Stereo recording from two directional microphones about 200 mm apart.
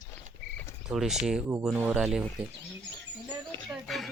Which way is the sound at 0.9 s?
Centre (ahead or behind).